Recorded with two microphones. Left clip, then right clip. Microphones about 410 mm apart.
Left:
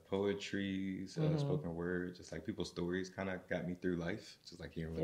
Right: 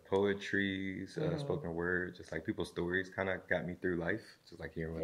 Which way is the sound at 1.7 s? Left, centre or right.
Centre.